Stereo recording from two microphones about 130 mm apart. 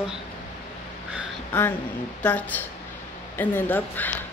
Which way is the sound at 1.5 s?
10° left (ahead or behind).